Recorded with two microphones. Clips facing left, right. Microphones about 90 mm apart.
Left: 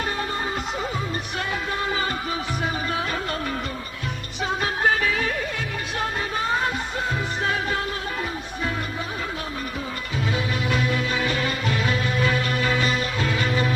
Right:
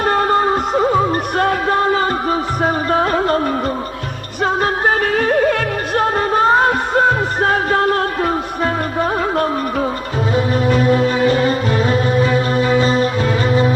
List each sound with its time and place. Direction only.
0.0 s music: 55° right (ahead or behind)
4.4 s music: 50° right (ahead or behind)
10.3 s music: 40° right (ahead or behind)